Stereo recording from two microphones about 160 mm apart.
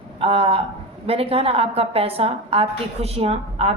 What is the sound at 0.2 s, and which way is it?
A man's voice, 35° right (ahead or behind).